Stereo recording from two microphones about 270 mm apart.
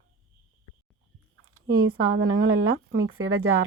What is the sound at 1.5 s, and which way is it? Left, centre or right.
Speech, right.